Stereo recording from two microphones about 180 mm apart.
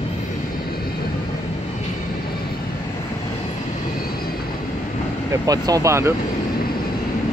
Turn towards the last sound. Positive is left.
turn(degrees=-15)  # may be behind; listen again after turning